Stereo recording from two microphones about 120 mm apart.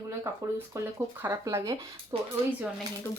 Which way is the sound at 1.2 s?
25° right (ahead or behind).